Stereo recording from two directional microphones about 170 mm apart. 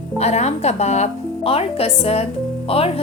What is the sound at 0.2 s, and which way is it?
Speech, 40° left (ahead or behind).